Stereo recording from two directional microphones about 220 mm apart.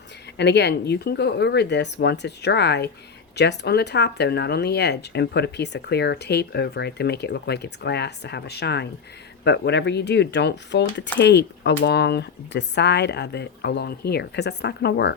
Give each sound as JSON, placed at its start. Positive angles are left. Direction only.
{"t": 0.3, "sound": "speech", "side_deg": 50}